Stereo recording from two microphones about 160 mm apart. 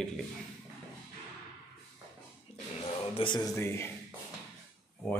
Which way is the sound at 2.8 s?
30° left (ahead or behind).